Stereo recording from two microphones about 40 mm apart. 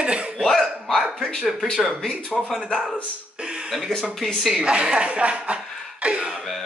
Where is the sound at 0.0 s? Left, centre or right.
Right.